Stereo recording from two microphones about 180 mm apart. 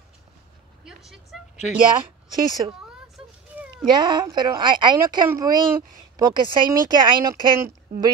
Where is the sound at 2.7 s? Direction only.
5° right (ahead or behind).